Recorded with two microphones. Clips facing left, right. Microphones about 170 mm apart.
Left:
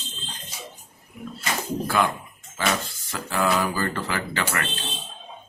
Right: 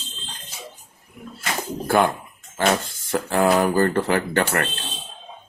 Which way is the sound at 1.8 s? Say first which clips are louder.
Right 7 dB; 55° right (ahead or behind).